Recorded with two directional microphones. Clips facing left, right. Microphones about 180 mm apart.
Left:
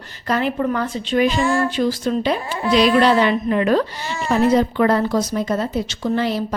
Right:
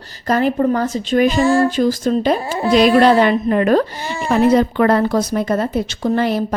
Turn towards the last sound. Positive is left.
turn(degrees=-55)  # may be behind; listen again after turning